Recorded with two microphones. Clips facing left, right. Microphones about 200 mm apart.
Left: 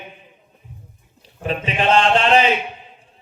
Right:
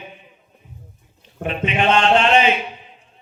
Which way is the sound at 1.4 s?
35° left (ahead or behind).